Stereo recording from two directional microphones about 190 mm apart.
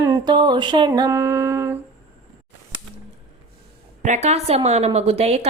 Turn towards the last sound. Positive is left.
turn(degrees=-35)  # may be behind; listen again after turning